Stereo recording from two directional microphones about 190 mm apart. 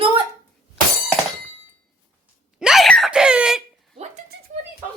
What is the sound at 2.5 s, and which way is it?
Speech, 5° right (ahead or behind).